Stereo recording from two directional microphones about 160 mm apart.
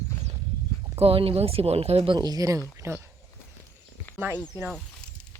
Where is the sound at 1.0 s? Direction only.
35° right (ahead or behind).